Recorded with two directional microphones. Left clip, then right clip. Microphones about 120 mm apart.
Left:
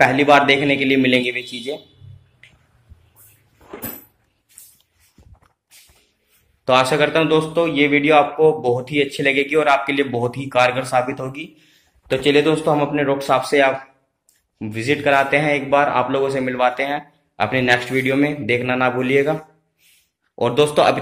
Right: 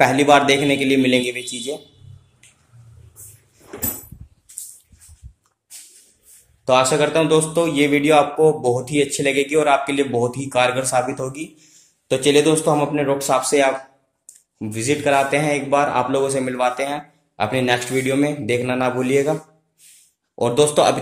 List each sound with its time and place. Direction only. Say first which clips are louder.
0.0 s a man's voice: left 1 dB; 20° right (ahead or behind)
6.6 s a man's voice: left 1 dB; 10° right (ahead or behind)
7.2 s a man's voice: even; 25° right (ahead or behind)
20.3 s a man's voice: even; 10° right (ahead or behind)